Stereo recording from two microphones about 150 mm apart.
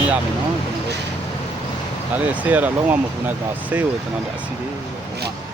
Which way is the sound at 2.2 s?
10° right (ahead or behind).